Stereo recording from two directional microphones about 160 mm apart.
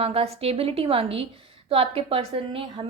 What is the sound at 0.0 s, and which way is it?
A woman's voice, 40° right (ahead or behind).